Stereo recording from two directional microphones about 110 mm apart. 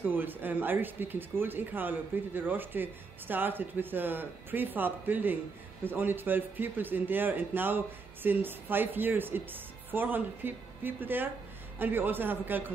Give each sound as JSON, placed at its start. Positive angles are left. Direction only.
{"t": 0.1, "sound": "speech", "side_deg": -20}